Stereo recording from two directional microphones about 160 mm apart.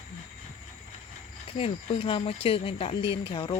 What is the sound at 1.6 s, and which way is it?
Speech, 35° left (ahead or behind).